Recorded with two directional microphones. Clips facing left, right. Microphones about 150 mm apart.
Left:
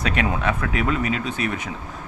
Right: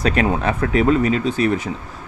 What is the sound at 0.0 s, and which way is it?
Speech, 35° right (ahead or behind).